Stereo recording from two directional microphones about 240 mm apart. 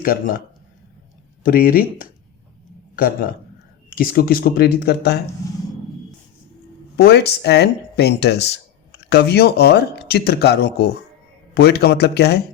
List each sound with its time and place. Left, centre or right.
0.0 s speech: left
1.5 s a man's voice: left
6.9 s speech: left